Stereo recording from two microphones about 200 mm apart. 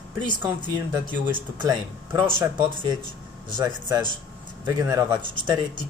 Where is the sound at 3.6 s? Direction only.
20° right (ahead or behind).